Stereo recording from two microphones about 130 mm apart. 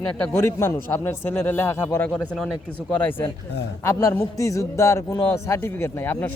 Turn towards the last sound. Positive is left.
turn(degrees=15)  # may be behind; listen again after turning